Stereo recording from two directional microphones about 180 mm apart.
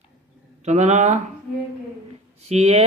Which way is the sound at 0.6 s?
40° right (ahead or behind).